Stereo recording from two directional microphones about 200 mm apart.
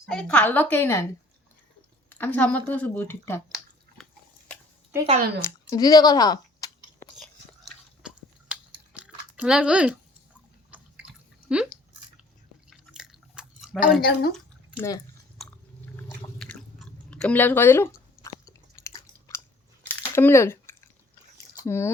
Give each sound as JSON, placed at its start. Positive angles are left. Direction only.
{"t": 0.1, "sound": "a woman's voice", "side_deg": 5}
{"t": 2.0, "sound": "a woman's voice", "side_deg": 10}
{"t": 4.0, "sound": "a sound", "side_deg": 0}
{"t": 5.4, "sound": "chewing", "side_deg": 20}
{"t": 8.0, "sound": "chewing", "side_deg": -5}
{"t": 11.0, "sound": "drip", "side_deg": -5}
{"t": 12.7, "sound": "chewing", "side_deg": 0}
{"t": 14.0, "sound": "speech", "side_deg": 50}
{"t": 14.8, "sound": "a woman's voice", "side_deg": 15}
{"t": 16.4, "sound": "chewing", "side_deg": 5}
{"t": 20.1, "sound": "speech", "side_deg": 15}